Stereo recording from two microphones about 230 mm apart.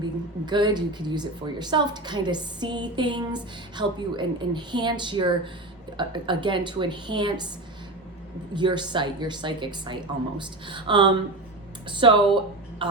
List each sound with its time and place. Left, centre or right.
0.0 s a woman's voice: centre
8.5 s a woman's voice: centre